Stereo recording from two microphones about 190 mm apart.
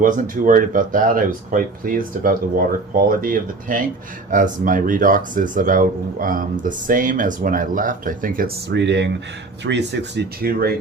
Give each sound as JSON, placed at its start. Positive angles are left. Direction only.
{"t": 0.0, "sound": "speech", "side_deg": -45}
{"t": 8.7, "sound": "speech", "side_deg": -65}